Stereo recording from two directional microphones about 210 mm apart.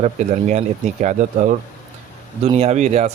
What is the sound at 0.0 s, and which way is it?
Speech, 35° right (ahead or behind).